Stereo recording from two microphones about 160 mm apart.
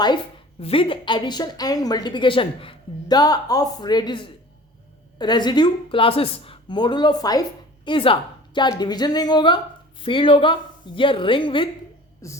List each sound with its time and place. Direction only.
0.6 s a woman's voice: 35° left (ahead or behind)
7.9 s a woman's voice: 35° left (ahead or behind)
12.2 s a woman's voice: 20° left (ahead or behind)